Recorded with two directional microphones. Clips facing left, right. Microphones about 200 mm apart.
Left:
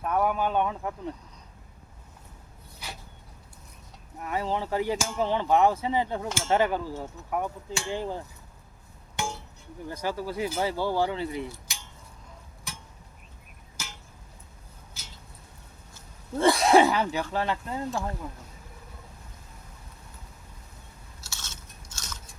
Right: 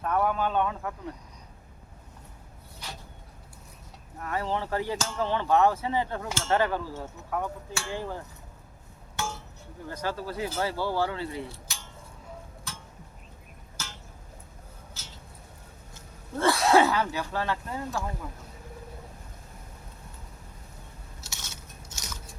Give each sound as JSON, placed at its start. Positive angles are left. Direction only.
{"t": 0.0, "sound": "speech", "side_deg": 10}
{"t": 4.2, "sound": "speech", "side_deg": 15}
{"t": 9.1, "sound": "music", "side_deg": 15}
{"t": 9.9, "sound": "speech", "side_deg": 15}
{"t": 11.7, "sound": "cutlery", "side_deg": 15}
{"t": 12.7, "sound": "a sound", "side_deg": 15}
{"t": 15.0, "sound": "a sound", "side_deg": 10}
{"t": 16.4, "sound": "speech", "side_deg": 15}
{"t": 21.2, "sound": "biting", "side_deg": -15}